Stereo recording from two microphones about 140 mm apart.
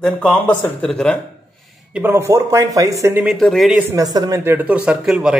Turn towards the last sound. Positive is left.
turn(degrees=-5)  # may be behind; listen again after turning